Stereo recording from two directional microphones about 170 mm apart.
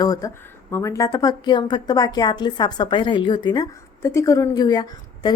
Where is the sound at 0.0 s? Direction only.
20° left (ahead or behind).